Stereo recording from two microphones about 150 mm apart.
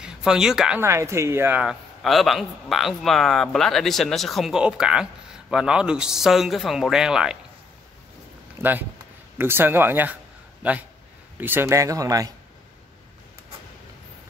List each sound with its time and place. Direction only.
0.0 s speech: 5° right (ahead or behind)
0.7 s a man's voice: 15° right (ahead or behind)
8.6 s a man's voice: 15° right (ahead or behind)